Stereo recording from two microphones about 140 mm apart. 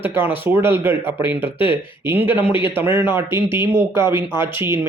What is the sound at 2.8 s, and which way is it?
Speech, 15° right (ahead or behind).